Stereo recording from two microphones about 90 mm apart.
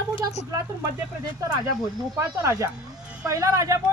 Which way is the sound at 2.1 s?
35° right (ahead or behind).